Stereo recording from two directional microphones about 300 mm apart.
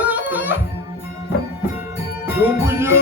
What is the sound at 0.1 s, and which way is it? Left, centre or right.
Music, centre.